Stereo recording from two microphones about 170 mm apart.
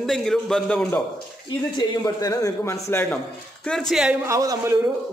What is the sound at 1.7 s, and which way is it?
A man's voice, 25° left (ahead or behind).